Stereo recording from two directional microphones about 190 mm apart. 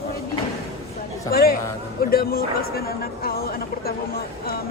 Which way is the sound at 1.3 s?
50° left (ahead or behind).